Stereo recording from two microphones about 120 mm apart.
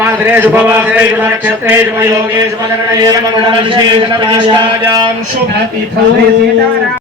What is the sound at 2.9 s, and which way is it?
Speech, 30° right (ahead or behind).